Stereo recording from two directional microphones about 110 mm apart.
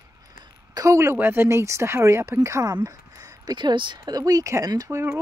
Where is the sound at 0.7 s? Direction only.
30° right (ahead or behind).